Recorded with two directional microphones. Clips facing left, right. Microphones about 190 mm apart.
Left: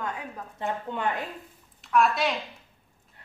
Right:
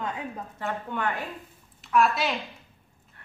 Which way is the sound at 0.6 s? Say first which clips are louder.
Left 1 dB; 20° left (ahead or behind).